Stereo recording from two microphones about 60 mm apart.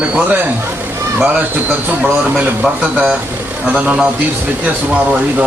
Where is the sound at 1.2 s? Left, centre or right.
Right.